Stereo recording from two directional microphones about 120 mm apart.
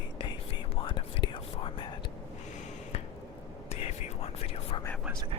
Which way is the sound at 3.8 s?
55° left (ahead or behind).